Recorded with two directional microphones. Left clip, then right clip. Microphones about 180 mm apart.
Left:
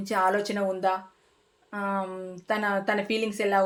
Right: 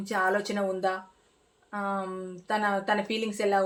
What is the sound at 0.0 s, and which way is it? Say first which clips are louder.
Speech: left 2 dB; 35° left (ahead or behind).